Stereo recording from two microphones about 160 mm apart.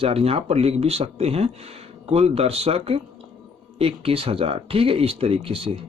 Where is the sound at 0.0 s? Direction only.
35° right (ahead or behind).